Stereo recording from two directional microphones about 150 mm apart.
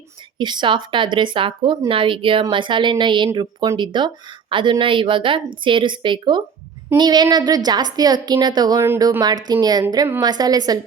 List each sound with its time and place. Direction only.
0.3 s a woman's voice: 30° right (ahead or behind)